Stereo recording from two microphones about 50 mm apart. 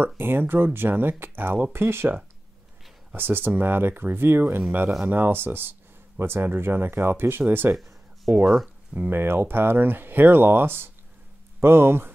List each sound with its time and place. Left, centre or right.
0.0 s speech: right